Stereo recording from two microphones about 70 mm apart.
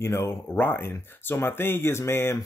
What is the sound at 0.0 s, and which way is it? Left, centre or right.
Speech, left.